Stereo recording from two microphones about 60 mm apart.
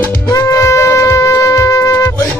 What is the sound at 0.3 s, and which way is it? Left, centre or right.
Music, left.